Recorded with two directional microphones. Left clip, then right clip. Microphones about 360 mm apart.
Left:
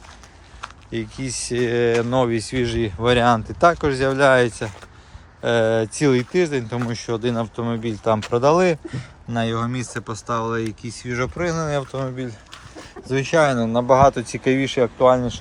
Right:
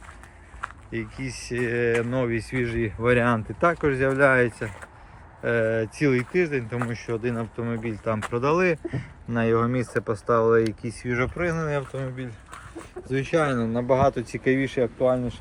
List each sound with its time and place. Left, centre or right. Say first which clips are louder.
0.9 s speech: left 8 dB; centre
9.9 s speech: right 5 dB; left
10.8 s speech: left 1 dB; centre